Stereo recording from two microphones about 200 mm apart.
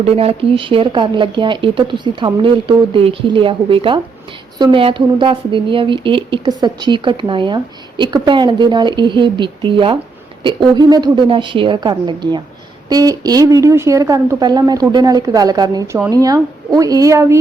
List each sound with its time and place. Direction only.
0.0 s speech: 30° right (ahead or behind)